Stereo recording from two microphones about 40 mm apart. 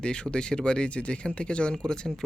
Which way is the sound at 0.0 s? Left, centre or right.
Left.